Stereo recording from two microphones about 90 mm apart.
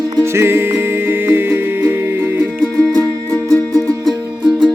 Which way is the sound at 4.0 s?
Centre (ahead or behind).